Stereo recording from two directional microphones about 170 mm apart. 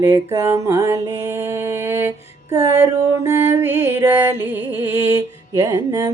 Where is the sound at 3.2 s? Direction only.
15° right (ahead or behind).